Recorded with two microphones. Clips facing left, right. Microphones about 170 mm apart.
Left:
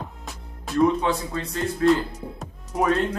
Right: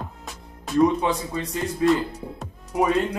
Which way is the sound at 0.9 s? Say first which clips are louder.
Even; 15° right (ahead or behind).